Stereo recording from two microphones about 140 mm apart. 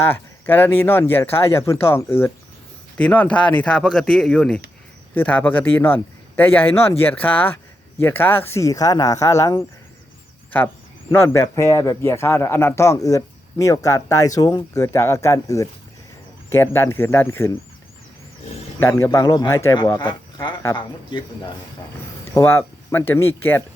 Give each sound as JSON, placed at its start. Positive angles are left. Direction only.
{"t": 0.0, "sound": "a man's voice", "side_deg": 15}
{"t": 11.1, "sound": "a man's voice", "side_deg": 15}
{"t": 18.8, "sound": "speech", "side_deg": 15}
{"t": 19.2, "sound": "a man's voice", "side_deg": 30}
{"t": 20.0, "sound": "speech", "side_deg": 35}
{"t": 22.4, "sound": "speech", "side_deg": 15}